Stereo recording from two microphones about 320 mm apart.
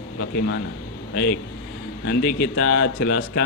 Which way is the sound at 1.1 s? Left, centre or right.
Left.